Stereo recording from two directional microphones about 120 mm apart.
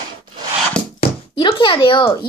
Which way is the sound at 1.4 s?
45° left (ahead or behind).